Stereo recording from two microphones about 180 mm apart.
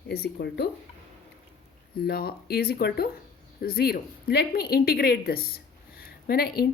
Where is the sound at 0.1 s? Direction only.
60° left (ahead or behind).